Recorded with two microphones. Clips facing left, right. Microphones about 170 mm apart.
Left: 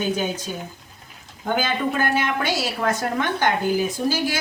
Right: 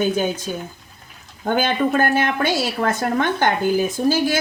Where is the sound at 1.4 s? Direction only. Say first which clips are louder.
Right 4 dB; 55° right (ahead or behind).